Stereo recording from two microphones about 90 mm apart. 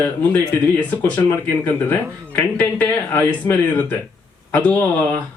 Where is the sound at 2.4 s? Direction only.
20° left (ahead or behind).